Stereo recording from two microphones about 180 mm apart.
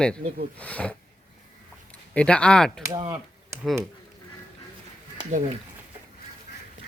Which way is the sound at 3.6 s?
Centre (ahead or behind).